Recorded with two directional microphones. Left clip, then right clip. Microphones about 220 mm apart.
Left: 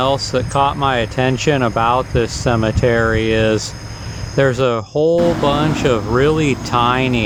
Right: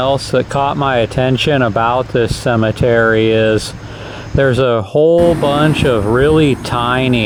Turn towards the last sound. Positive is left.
turn(degrees=-25)  # may be behind; listen again after turning